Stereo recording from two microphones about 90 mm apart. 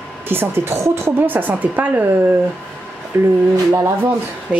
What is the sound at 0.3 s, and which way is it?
A woman's voice, 25° right (ahead or behind).